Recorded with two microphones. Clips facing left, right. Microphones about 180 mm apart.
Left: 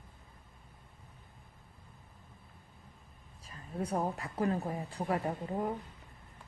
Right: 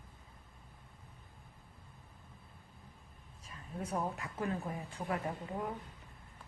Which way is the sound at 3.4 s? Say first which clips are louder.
Left 5 dB; 35° left (ahead or behind).